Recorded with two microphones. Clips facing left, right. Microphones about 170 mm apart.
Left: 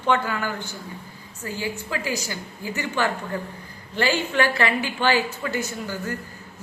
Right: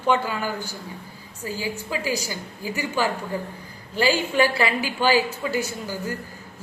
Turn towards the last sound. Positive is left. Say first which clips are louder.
# even
turn(degrees=-10)  # may be behind; listen again after turning